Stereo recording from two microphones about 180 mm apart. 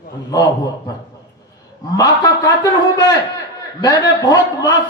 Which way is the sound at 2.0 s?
20° left (ahead or behind).